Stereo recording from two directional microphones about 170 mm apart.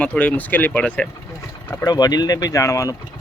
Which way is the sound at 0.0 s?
5° left (ahead or behind).